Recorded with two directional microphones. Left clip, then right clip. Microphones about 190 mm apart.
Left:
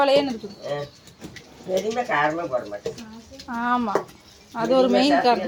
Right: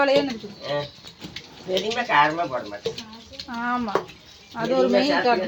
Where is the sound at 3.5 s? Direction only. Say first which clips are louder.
Left 2 dB; 15° left (ahead or behind).